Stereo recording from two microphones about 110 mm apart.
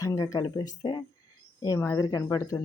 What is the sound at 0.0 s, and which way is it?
Speech, 30° left (ahead or behind).